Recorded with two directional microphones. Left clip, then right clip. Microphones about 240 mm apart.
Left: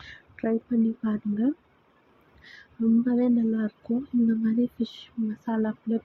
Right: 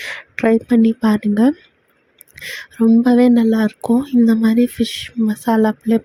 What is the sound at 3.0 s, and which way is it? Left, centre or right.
Speech, right.